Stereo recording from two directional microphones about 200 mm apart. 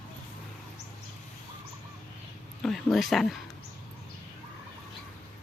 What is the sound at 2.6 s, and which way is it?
Speech, centre (ahead or behind).